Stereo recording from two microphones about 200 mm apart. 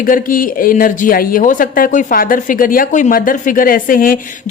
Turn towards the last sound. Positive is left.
turn(degrees=45)  # may be behind; listen again after turning